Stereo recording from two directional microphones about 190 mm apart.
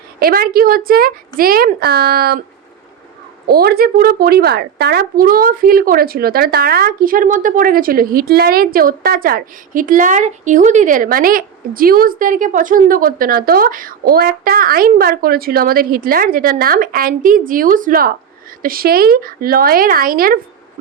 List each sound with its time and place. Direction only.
0.2 s a woman's voice: 50° right (ahead or behind)
3.4 s a woman's voice: 55° right (ahead or behind)